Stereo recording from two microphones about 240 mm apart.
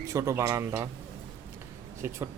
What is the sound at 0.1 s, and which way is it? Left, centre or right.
Speech, centre.